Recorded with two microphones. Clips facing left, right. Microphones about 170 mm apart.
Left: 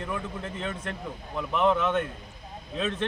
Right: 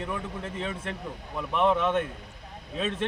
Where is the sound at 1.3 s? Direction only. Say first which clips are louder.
Even; 5° right (ahead or behind).